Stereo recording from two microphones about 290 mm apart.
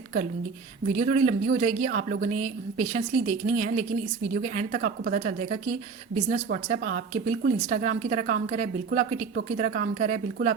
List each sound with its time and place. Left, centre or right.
0.9 s a woman's voice: right